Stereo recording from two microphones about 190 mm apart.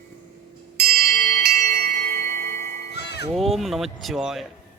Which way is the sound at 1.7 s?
55° right (ahead or behind).